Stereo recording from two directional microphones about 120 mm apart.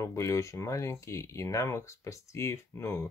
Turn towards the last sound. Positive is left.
turn(degrees=20)  # may be behind; listen again after turning